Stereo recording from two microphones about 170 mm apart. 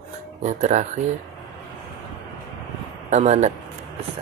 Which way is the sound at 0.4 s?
45° right (ahead or behind).